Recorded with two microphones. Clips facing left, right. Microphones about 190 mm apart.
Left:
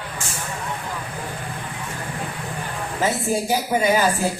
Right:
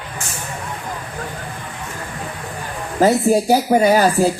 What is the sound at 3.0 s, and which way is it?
A woman's voice, 40° right (ahead or behind).